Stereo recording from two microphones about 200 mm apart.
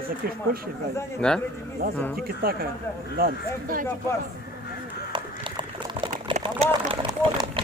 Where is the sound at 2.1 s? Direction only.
45° right (ahead or behind).